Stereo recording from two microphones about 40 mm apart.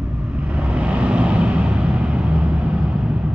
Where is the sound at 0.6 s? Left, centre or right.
Right.